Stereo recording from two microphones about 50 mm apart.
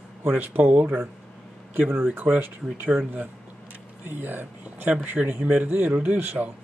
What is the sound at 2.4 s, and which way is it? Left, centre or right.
Speech, right.